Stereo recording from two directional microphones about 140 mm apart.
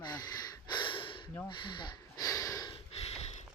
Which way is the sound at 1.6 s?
35° left (ahead or behind).